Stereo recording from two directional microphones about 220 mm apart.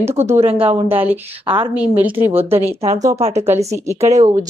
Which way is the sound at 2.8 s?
30° right (ahead or behind).